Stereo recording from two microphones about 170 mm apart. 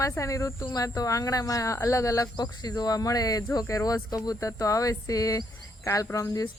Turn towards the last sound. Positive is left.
turn(degrees=20)  # may be behind; listen again after turning